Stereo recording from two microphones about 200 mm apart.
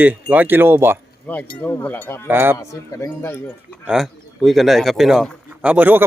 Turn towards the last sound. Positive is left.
turn(degrees=-10)  # may be behind; listen again after turning